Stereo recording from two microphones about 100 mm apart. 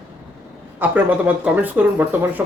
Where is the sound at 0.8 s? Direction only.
20° right (ahead or behind).